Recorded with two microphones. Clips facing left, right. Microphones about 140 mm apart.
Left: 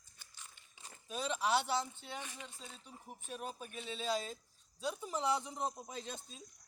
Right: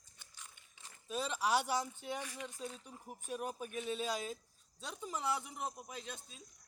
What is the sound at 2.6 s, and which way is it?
Speech, 10° right (ahead or behind).